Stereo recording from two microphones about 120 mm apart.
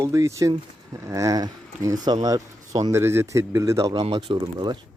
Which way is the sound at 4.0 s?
45° right (ahead or behind).